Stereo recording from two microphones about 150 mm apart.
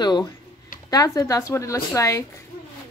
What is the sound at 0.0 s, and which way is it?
A woman's voice, 30° left (ahead or behind).